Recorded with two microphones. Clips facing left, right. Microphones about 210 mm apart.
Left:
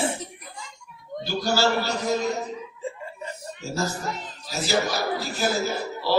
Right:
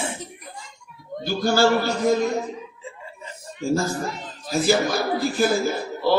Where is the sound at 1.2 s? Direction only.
50° right (ahead or behind).